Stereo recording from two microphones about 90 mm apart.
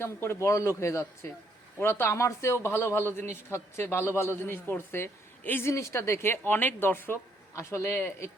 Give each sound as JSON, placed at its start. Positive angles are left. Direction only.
{"t": 0.0, "sound": "a man's voice", "side_deg": 30}